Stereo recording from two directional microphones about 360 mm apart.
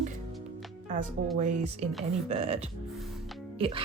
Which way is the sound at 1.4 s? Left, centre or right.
Centre.